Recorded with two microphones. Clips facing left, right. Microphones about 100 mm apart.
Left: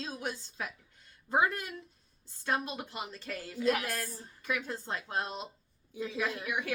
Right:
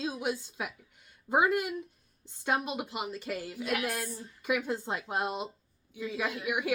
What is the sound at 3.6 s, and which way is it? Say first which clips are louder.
Speech: left 4 dB; 30° left (ahead or behind).